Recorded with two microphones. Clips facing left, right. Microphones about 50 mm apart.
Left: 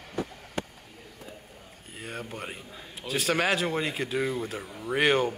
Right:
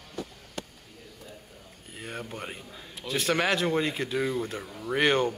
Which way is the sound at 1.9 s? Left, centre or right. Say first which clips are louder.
Even; centre.